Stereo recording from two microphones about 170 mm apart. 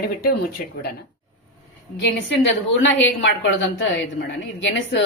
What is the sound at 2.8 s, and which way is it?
A woman's voice, 90° left.